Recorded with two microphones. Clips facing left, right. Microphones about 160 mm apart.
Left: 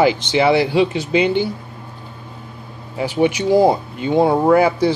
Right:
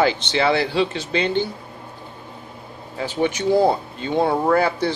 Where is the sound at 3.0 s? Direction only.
10° left (ahead or behind).